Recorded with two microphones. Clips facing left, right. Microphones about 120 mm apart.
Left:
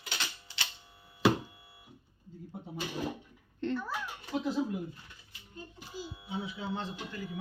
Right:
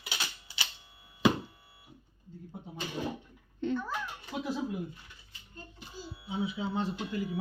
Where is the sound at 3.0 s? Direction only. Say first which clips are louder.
Right 1 dB; centre (ahead or behind).